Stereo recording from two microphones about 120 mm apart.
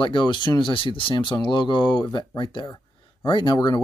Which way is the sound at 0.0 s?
40° left (ahead or behind).